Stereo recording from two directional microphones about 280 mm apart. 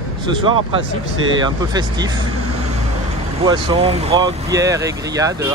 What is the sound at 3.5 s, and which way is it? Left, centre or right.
Speech, centre.